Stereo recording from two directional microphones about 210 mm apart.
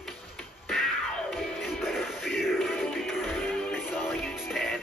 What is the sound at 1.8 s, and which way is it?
Music, centre (ahead or behind).